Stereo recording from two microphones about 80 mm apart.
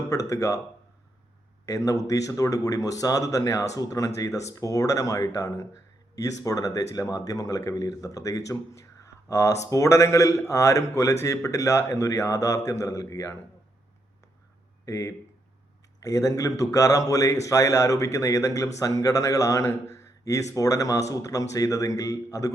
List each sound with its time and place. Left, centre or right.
0.1 s speech: left
1.6 s speech: left
14.8 s speech: left